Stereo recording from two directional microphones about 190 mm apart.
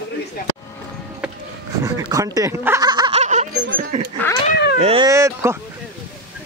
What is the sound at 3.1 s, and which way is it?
Laughter, 40° right (ahead or behind).